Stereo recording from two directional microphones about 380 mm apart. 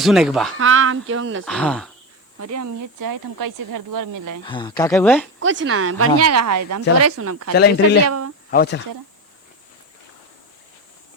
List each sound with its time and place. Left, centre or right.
0.0 s speech: centre
0.6 s speech: right
1.5 s speech: centre
2.4 s speech: right
4.4 s speech: centre
5.4 s speech: right
7.5 s speech: left
8.0 s speech: right
8.4 s speech: left